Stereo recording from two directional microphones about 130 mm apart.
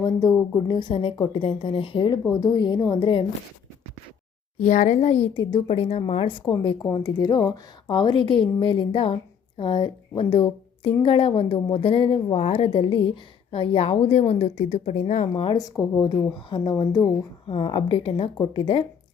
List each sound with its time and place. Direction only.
0.0 s a woman's voice: 30° left (ahead or behind)
4.6 s speech: 70° left (ahead or behind)
5.3 s a woman's voice: 35° left (ahead or behind)
5.6 s a woman's voice: 55° left (ahead or behind)
6.3 s a woman's voice: 35° left (ahead or behind); by 15.4 s 60° left (ahead or behind)
15.5 s a woman's voice: 25° left (ahead or behind)
17.4 s a woman's voice: 45° left (ahead or behind)